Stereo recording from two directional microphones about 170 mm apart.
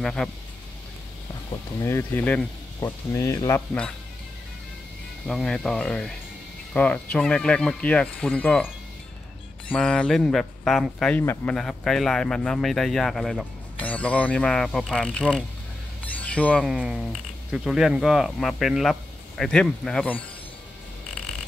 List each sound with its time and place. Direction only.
0.0 s speech: 5° left (ahead or behind)
1.8 s speech: 15° left (ahead or behind)
5.2 s speech: 5° left (ahead or behind)
9.7 s speech: 5° left (ahead or behind)